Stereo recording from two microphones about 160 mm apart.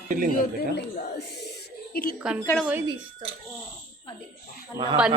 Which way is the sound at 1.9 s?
65° left (ahead or behind).